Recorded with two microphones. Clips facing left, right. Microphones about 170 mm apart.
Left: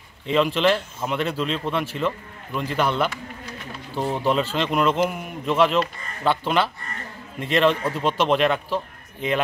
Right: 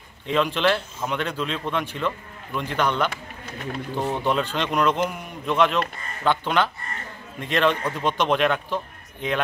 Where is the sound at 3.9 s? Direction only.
Centre (ahead or behind).